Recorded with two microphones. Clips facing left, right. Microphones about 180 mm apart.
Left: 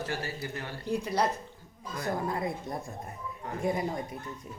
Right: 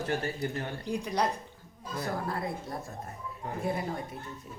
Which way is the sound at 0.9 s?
5° left (ahead or behind).